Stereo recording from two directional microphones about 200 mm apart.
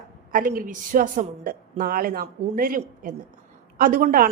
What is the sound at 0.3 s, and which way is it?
A woman's voice, 45° right (ahead or behind).